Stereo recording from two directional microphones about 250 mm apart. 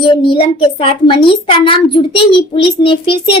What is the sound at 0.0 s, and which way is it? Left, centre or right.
A child's voice, centre.